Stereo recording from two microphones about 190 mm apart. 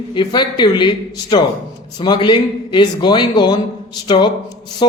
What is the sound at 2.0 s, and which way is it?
Speech, 25° left (ahead or behind).